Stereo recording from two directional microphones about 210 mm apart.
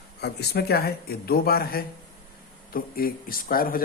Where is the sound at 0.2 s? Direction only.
50° left (ahead or behind).